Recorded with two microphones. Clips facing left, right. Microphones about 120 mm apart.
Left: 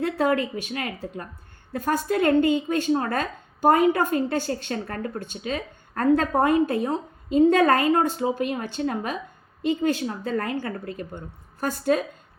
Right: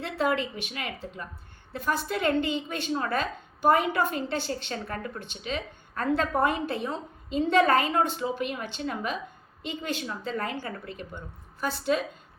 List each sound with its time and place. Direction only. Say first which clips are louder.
0.0 s a woman's voice: left 5 dB; 45° left (ahead or behind)